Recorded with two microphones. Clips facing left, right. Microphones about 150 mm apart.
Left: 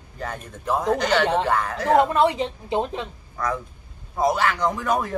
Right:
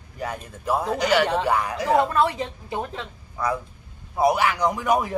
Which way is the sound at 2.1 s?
20° left (ahead or behind).